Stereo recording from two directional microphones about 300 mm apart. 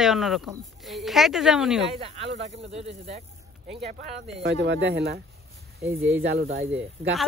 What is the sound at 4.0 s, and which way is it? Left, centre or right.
Speech, right.